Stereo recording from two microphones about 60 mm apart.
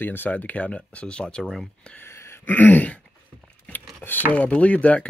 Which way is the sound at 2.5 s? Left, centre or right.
Left.